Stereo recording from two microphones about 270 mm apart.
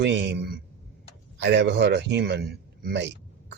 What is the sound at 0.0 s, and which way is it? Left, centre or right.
Speech, right.